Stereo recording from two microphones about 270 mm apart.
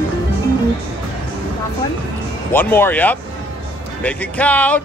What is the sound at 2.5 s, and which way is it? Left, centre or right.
A man's voice, centre.